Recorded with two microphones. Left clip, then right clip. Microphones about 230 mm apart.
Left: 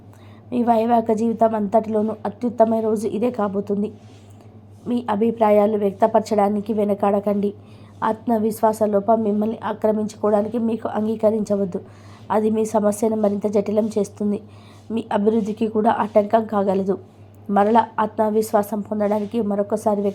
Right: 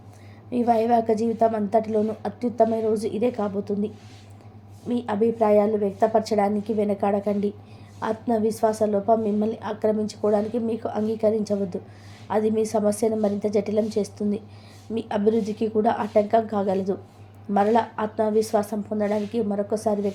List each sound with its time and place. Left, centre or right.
0.5 s a woman's voice: centre